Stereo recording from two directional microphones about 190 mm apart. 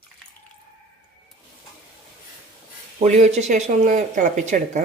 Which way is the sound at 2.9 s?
35° right (ahead or behind).